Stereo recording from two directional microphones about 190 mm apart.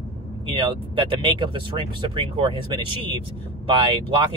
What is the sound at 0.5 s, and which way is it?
Speech, 25° right (ahead or behind).